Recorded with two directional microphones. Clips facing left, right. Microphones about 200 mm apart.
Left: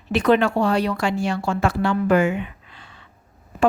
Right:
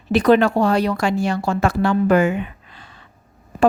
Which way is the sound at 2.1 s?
40° right (ahead or behind).